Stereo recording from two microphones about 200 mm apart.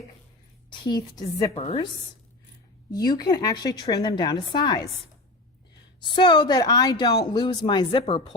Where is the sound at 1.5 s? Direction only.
30° left (ahead or behind).